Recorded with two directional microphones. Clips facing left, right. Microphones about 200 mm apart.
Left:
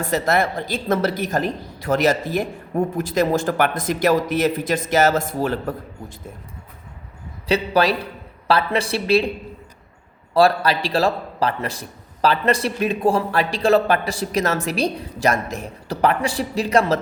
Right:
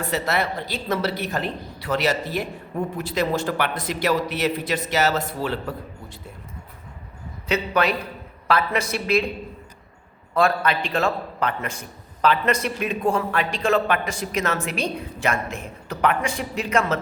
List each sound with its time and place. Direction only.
0.0 s a woman's voice: 45° left (ahead or behind)
7.4 s a man's voice: 35° left (ahead or behind)
10.3 s a man's voice: 35° left (ahead or behind)